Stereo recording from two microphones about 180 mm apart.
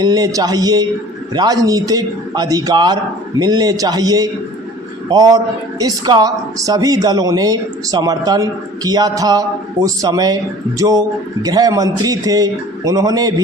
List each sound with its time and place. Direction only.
0.0 s speech: 20° right (ahead or behind)